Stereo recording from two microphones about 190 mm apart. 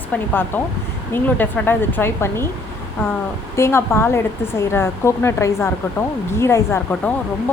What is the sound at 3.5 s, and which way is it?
A woman's voice, 15° left (ahead or behind).